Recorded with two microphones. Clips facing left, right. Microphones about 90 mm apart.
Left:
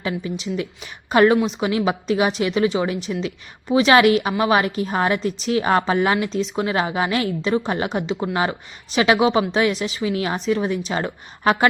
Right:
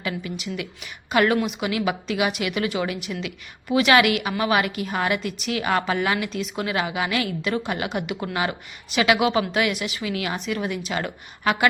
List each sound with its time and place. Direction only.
0.0 s a woman's voice: 25° left (ahead or behind)